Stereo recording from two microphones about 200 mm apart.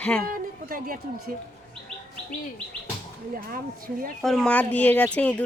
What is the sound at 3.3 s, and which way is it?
Speech, 45° right (ahead or behind).